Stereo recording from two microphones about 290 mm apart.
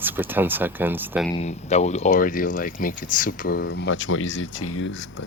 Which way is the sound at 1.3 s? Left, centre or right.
Left.